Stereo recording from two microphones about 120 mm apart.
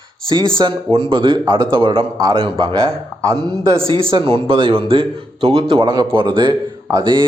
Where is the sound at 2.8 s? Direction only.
25° right (ahead or behind).